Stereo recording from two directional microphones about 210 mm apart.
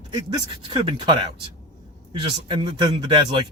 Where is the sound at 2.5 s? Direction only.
20° right (ahead or behind).